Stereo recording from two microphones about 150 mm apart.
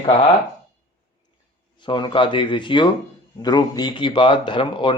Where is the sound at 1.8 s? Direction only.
30° left (ahead or behind).